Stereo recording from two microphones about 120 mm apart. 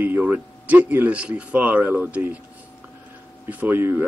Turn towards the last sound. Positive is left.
turn(degrees=-20)  # may be behind; listen again after turning